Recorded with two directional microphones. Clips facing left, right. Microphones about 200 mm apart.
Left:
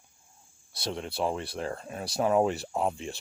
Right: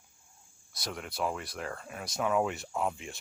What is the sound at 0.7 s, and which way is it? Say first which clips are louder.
Speech: left 5 dB; 30° left (ahead or behind).